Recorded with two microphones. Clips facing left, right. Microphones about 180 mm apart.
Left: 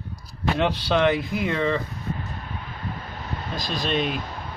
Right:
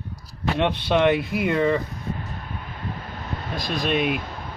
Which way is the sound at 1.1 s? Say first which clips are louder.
Right 2 dB; 65° right (ahead or behind).